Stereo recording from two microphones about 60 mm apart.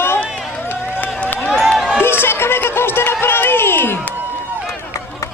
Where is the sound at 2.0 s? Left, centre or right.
Left.